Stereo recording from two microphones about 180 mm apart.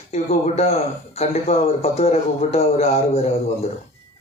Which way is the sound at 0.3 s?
40° left (ahead or behind).